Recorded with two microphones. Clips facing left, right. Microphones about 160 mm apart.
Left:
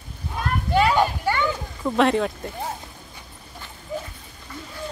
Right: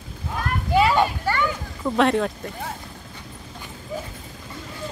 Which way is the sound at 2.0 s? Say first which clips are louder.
Even; centre (ahead or behind).